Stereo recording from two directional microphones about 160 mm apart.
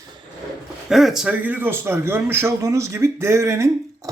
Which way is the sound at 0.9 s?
Centre (ahead or behind).